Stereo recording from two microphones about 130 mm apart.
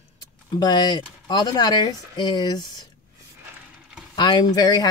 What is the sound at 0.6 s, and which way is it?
Speech, 35° left (ahead or behind).